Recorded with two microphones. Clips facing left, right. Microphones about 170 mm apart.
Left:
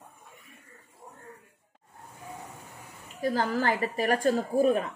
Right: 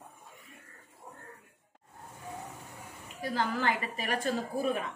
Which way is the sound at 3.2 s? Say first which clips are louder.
Left 5 dB; 40° left (ahead or behind).